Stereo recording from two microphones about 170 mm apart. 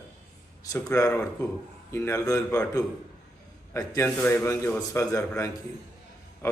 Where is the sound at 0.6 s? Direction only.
20° left (ahead or behind).